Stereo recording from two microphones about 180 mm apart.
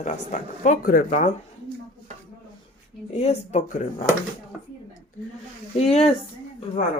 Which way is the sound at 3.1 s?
35° left (ahead or behind).